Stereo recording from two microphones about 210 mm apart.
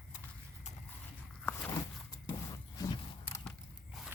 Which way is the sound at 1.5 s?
5° left (ahead or behind).